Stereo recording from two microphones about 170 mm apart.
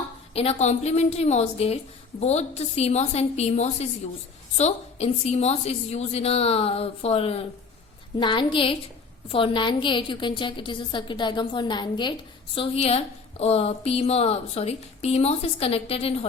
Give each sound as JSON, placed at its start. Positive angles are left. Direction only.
{"t": 0.3, "sound": "a woman's voice", "side_deg": 40}